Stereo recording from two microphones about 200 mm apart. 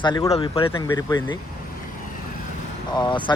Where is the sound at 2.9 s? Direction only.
20° left (ahead or behind).